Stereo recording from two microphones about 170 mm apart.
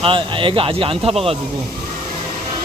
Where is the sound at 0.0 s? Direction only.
30° right (ahead or behind).